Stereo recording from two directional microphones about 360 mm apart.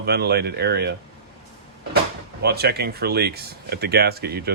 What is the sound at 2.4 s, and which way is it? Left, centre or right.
Speech, right.